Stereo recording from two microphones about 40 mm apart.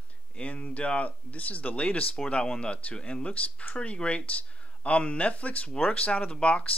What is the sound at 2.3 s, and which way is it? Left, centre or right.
Speech, left.